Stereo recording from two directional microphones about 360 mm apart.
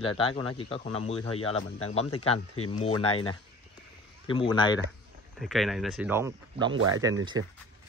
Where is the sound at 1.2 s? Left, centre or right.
Left.